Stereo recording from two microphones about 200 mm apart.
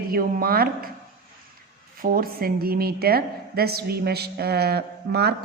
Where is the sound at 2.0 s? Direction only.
45° right (ahead or behind).